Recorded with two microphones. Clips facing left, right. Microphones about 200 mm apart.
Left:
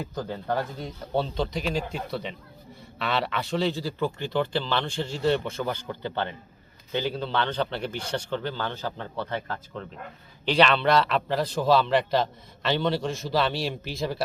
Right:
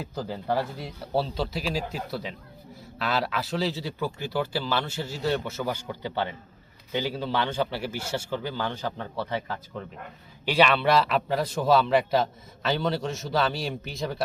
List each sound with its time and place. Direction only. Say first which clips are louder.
0.1 s a man's voice: right 3 dB; 10° right (ahead or behind)